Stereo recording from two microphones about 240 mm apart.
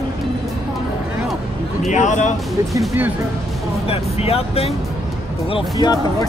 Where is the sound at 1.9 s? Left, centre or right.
Left.